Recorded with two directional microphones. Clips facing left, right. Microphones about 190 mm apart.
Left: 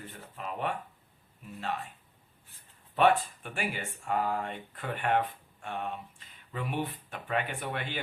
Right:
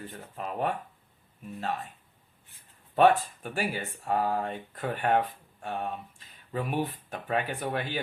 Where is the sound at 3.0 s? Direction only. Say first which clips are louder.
Right 3 dB; 40° right (ahead or behind).